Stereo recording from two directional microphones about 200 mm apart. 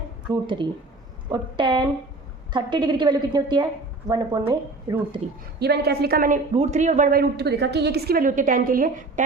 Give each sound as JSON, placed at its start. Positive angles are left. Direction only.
{"t": 0.3, "sound": "a woman's voice", "side_deg": -25}
{"t": 5.5, "sound": "a woman's voice", "side_deg": -55}